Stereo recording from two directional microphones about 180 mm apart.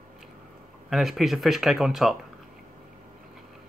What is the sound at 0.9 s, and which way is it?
Speech, centre (ahead or behind).